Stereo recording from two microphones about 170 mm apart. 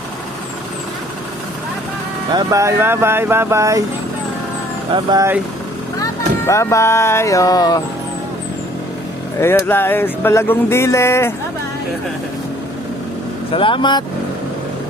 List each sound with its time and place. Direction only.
2.3 s speech: 20° right (ahead or behind)
5.1 s speech: 15° right (ahead or behind)
6.0 s speech: 15° left (ahead or behind)
9.4 s speech: 15° left (ahead or behind)
13.5 s speech: 30° left (ahead or behind)